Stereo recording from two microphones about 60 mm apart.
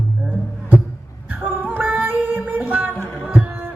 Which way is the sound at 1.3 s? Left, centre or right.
Right.